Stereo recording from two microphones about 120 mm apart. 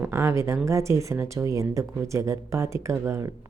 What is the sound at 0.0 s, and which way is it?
Speech, 25° right (ahead or behind).